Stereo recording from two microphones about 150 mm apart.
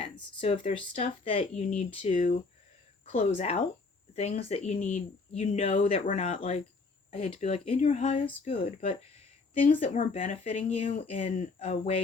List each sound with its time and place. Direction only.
0.0 s speech: 35° left (ahead or behind)